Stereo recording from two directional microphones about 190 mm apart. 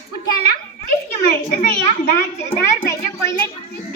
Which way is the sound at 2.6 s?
15° left (ahead or behind).